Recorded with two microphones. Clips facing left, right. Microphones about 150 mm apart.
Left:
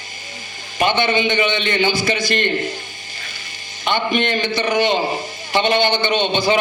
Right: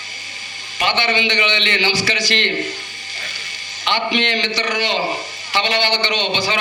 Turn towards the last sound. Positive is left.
turn(degrees=50)  # may be behind; listen again after turning